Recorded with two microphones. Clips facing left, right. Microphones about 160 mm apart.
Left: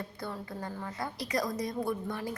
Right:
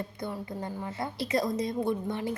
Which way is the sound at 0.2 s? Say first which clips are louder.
Right 2 dB; 20° right (ahead or behind).